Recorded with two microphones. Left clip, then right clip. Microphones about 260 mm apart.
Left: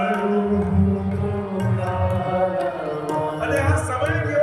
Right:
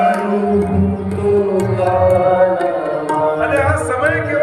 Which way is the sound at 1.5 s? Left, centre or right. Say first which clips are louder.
Right 11 dB; centre.